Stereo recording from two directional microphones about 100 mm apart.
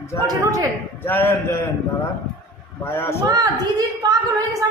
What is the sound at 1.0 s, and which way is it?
Speech, 20° left (ahead or behind).